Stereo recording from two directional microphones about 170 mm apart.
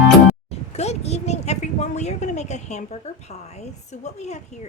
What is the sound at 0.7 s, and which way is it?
A woman's voice, 40° left (ahead or behind).